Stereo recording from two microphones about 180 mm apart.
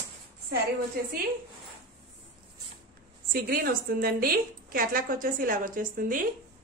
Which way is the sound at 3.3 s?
55° right (ahead or behind).